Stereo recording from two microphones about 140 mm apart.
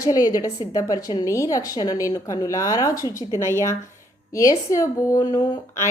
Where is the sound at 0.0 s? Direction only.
25° left (ahead or behind).